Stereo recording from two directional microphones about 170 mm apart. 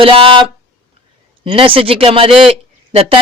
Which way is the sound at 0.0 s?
30° right (ahead or behind).